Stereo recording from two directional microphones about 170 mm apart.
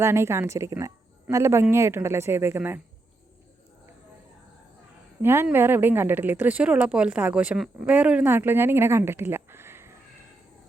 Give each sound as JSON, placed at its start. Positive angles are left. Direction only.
{"t": 0.0, "sound": "a woman's voice", "side_deg": -15}
{"t": 5.2, "sound": "a woman's voice", "side_deg": -15}